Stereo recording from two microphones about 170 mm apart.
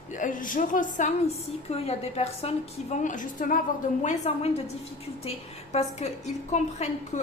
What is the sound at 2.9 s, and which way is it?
Speech, 50° left (ahead or behind).